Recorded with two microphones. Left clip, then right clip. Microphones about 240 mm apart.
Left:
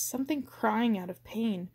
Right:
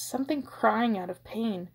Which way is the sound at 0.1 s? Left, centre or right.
Left.